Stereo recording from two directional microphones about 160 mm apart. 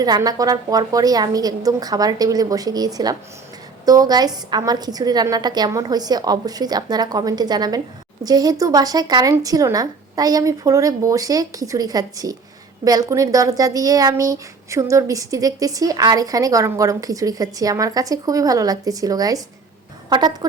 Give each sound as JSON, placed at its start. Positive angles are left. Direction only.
{"t": 0.0, "sound": "speech", "side_deg": -25}